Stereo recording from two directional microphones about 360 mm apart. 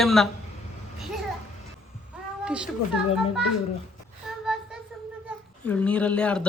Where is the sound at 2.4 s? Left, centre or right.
Centre.